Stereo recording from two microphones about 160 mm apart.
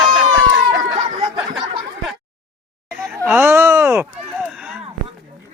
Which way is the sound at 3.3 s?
15° right (ahead or behind).